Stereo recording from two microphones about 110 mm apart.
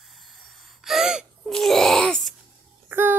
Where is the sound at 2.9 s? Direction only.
20° right (ahead or behind).